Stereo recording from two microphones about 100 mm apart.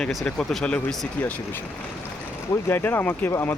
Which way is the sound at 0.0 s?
Centre (ahead or behind).